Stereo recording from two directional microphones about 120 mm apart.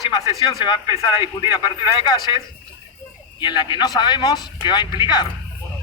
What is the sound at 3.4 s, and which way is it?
A man's voice, 40° left (ahead or behind).